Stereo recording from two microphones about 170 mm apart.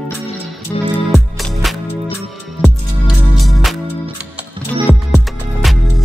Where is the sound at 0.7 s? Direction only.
20° left (ahead or behind).